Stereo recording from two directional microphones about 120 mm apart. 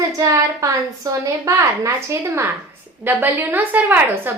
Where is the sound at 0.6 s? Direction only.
25° right (ahead or behind).